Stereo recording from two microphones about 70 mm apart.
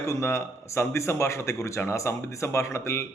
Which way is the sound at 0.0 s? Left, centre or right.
Left.